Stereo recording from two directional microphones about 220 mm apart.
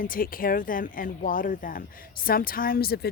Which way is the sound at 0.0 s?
40° left (ahead or behind).